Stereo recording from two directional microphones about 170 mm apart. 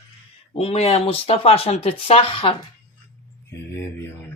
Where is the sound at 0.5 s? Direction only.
35° left (ahead or behind).